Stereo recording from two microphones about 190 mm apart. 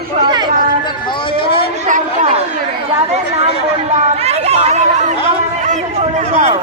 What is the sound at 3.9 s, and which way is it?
Speech, 35° right (ahead or behind).